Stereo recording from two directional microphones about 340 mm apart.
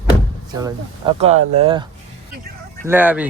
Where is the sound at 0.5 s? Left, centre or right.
Centre.